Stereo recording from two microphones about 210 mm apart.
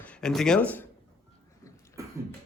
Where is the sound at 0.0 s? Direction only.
5° left (ahead or behind).